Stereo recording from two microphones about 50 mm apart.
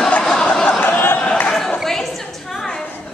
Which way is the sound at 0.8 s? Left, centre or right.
Left.